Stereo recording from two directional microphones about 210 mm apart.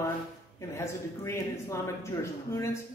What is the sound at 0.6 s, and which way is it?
Speech, 15° left (ahead or behind).